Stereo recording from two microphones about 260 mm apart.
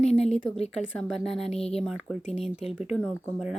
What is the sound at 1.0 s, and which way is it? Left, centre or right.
Speech, centre.